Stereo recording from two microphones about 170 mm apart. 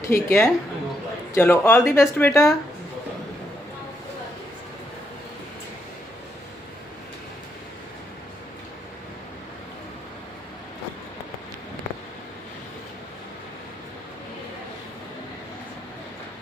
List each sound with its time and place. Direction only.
0.0 s speech: 15° left (ahead or behind)